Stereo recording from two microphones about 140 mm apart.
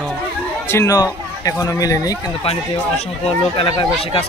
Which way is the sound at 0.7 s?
20° left (ahead or behind).